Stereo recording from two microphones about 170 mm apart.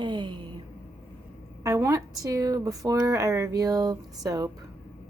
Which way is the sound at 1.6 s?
15° right (ahead or behind).